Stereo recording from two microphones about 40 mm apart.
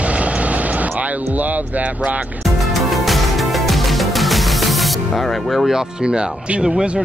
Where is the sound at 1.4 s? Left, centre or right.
Right.